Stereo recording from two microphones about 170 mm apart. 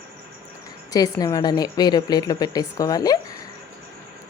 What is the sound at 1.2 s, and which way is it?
Speech, 25° left (ahead or behind).